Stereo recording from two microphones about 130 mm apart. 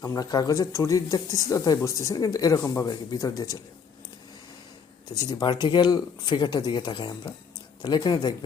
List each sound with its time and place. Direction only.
0.0 s speech: 30° left (ahead or behind)
5.0 s speech: 30° left (ahead or behind)